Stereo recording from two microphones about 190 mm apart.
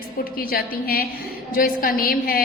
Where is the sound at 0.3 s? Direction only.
50° left (ahead or behind).